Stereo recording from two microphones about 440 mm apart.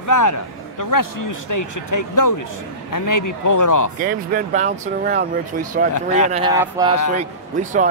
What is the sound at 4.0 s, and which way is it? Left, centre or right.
Speech, centre.